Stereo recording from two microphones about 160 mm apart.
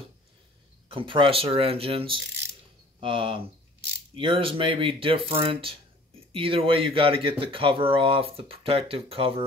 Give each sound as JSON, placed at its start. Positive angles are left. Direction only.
{"t": 0.8, "sound": "speech", "side_deg": -30}